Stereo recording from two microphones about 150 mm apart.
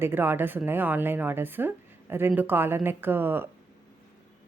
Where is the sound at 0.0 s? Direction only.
15° right (ahead or behind).